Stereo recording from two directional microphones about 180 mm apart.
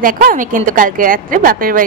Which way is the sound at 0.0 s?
50° right (ahead or behind).